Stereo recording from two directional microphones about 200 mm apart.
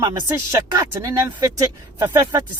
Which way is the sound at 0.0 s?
15° right (ahead or behind).